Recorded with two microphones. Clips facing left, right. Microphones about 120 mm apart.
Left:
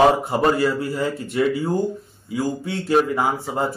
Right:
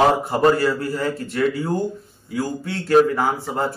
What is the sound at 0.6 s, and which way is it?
Speech, 15° left (ahead or behind).